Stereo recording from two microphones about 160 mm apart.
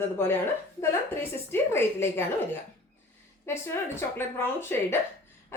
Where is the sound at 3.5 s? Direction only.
15° left (ahead or behind).